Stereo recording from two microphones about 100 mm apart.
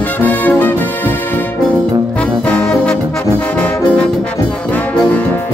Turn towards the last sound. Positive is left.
turn(degrees=10)  # may be behind; listen again after turning